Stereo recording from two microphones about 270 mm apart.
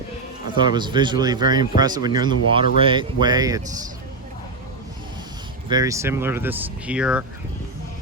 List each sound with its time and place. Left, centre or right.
0.6 s speech: centre
5.6 s speech: centre